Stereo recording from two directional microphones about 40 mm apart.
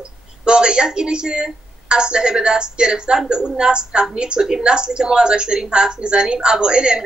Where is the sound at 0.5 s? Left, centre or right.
Right.